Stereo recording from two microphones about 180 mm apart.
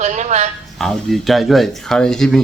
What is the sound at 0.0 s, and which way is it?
Speech, 40° right (ahead or behind).